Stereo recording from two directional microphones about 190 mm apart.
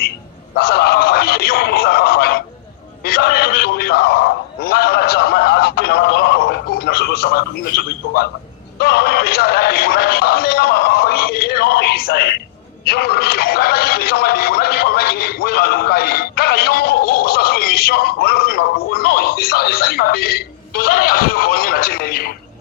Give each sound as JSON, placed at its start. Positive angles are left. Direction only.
{"t": 0.5, "sound": "a man's voice", "side_deg": 55}